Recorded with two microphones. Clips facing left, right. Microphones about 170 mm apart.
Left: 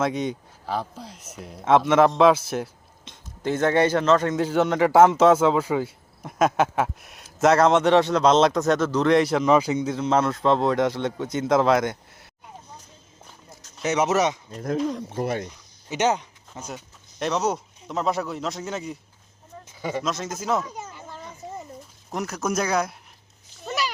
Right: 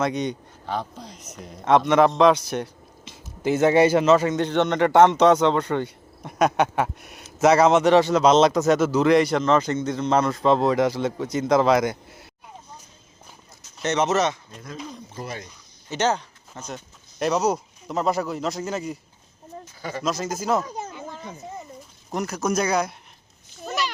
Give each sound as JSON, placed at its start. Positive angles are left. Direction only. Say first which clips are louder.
{"t": 0.0, "sound": "speech", "louder": "even", "side_deg": 0}
{"t": 13.8, "sound": "speech", "louder": "even", "side_deg": 10}
{"t": 14.8, "sound": "speech", "louder": "left 9 dB", "side_deg": 75}
{"t": 15.9, "sound": "speech", "louder": "left 1 dB", "side_deg": 15}
{"t": 17.2, "sound": "speech", "louder": "right 2 dB", "side_deg": 0}
{"t": 20.0, "sound": "speech", "louder": "right 5 dB", "side_deg": 0}
{"t": 22.1, "sound": "speech", "louder": "right 2 dB", "side_deg": 0}
{"t": 23.6, "sound": "a sound", "louder": "even", "side_deg": 10}